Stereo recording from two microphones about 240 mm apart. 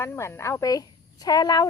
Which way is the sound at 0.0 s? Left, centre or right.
Centre.